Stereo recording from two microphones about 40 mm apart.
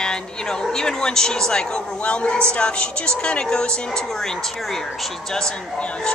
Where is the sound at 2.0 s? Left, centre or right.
Left.